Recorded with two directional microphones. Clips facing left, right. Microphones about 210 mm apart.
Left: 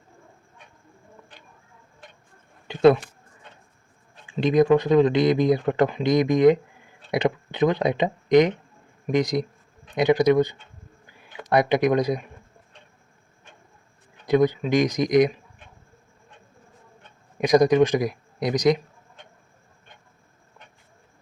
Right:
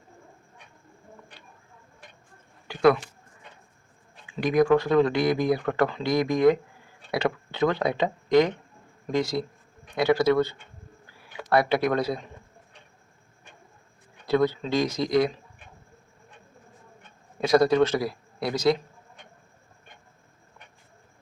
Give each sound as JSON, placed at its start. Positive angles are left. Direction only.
{"t": 2.6, "sound": "speech", "side_deg": 25}
{"t": 4.3, "sound": "speech", "side_deg": 25}
{"t": 11.0, "sound": "a sound", "side_deg": 20}
{"t": 14.3, "sound": "speech", "side_deg": 15}
{"t": 17.3, "sound": "a man's voice", "side_deg": 15}